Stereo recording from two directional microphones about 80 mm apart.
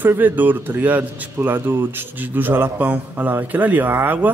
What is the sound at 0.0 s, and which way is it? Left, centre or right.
Speech, right.